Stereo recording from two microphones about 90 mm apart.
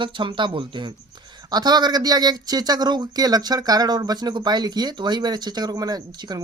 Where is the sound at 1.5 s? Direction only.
50° right (ahead or behind).